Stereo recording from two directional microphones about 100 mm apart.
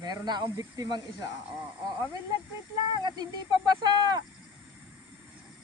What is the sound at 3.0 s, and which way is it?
Speech, 45° right (ahead or behind).